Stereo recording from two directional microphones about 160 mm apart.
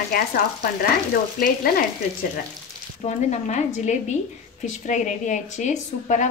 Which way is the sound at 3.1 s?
45° left (ahead or behind).